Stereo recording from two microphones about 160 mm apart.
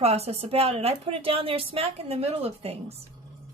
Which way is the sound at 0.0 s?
40° right (ahead or behind).